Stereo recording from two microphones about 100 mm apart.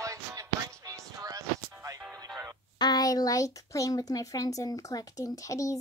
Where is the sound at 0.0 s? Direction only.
35° right (ahead or behind).